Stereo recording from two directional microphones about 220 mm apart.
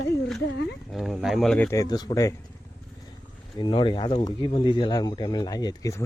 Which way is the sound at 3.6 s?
20° left (ahead or behind).